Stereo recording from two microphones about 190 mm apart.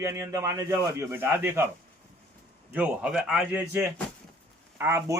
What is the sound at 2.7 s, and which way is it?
Speech, 5° right (ahead or behind).